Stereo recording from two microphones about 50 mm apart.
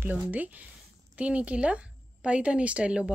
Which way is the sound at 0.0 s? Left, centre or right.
Right.